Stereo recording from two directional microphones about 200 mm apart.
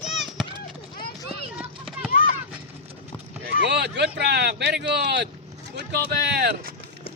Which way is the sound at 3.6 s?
55° right (ahead or behind).